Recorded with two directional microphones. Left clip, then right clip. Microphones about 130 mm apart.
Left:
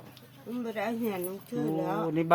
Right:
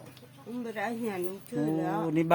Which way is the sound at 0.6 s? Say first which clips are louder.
Left 1 dB; 10° right (ahead or behind).